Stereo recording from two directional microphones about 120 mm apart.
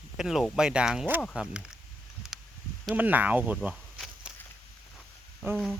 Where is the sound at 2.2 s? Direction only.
5° right (ahead or behind).